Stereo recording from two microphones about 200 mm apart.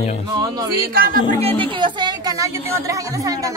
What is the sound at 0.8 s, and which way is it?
Speech, 45° right (ahead or behind).